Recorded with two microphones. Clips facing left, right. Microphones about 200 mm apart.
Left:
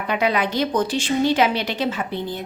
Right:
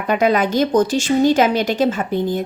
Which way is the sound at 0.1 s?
45° right (ahead or behind).